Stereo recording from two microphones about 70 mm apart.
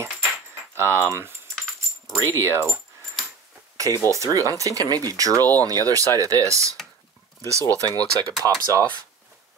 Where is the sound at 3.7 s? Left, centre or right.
Right.